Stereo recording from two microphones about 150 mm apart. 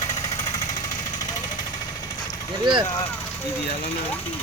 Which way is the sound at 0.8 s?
25° left (ahead or behind).